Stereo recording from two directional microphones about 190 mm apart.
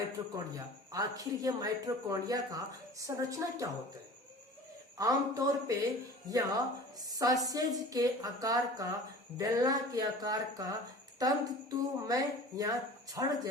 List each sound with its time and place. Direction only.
0.0 s a man's voice: 20° right (ahead or behind)
4.9 s a man's voice: 20° right (ahead or behind)